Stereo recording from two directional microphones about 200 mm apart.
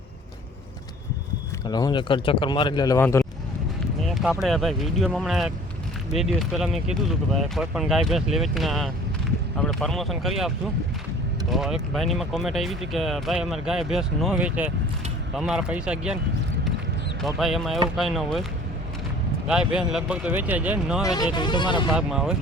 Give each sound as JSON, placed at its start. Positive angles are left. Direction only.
{"t": 1.6, "sound": "speech", "side_deg": 20}
{"t": 4.0, "sound": "speech", "side_deg": 0}
{"t": 11.5, "sound": "speech", "side_deg": 0}
{"t": 17.2, "sound": "speech", "side_deg": 0}
{"t": 19.5, "sound": "speech", "side_deg": -5}
{"t": 21.0, "sound": "speech", "side_deg": 20}
{"t": 21.9, "sound": "speech", "side_deg": -5}